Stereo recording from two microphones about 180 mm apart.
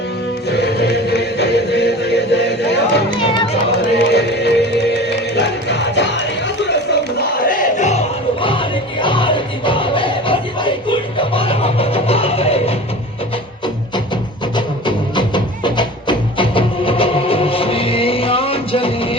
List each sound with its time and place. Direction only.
0.5 s music: 65° left (ahead or behind)
7.2 s music: 50° left (ahead or behind); by 12.7 s 35° left (ahead or behind)
14.5 s music: 25° left (ahead or behind)